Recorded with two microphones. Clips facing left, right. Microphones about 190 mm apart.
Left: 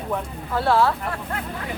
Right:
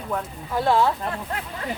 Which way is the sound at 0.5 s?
15° right (ahead or behind).